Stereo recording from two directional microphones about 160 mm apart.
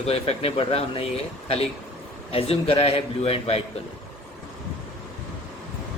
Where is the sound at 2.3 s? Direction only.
35° left (ahead or behind).